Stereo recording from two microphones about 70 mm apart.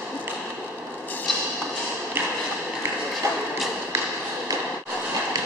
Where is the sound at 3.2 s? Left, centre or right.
Right.